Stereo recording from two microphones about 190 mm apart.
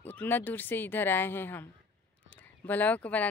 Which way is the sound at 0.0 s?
10° left (ahead or behind).